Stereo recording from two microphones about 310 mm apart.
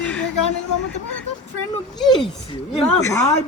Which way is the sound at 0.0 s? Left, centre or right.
Centre.